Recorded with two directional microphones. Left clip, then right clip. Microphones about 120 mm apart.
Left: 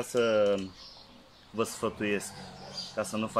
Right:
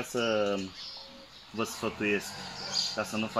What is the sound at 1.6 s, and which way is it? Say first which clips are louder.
Speech: left 1 dB; 35° left (ahead or behind).